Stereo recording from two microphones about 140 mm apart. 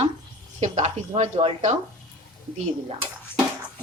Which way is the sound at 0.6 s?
55° right (ahead or behind).